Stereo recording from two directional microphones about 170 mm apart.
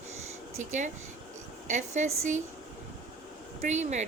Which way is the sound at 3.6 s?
45° right (ahead or behind).